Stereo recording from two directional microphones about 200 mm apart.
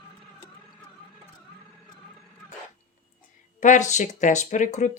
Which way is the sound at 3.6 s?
35° left (ahead or behind).